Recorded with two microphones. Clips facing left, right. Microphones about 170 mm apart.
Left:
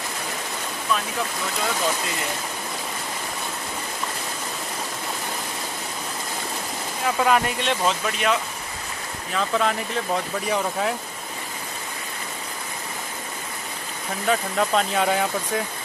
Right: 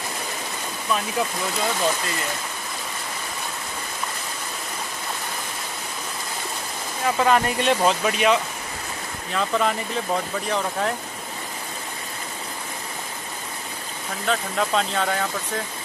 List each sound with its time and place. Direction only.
7.2 s speech: 5° left (ahead or behind)
14.2 s speech: 5° left (ahead or behind)